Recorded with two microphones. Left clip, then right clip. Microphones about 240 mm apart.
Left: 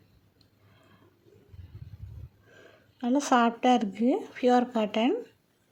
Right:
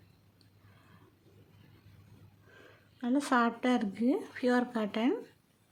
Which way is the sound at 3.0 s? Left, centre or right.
Centre.